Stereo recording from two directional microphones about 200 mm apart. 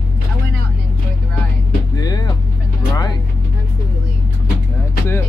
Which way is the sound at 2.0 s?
20° left (ahead or behind).